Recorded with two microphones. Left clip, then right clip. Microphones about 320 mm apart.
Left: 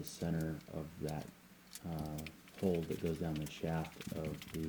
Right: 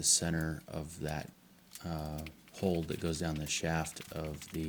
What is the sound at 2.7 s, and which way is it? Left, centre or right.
Speech, right.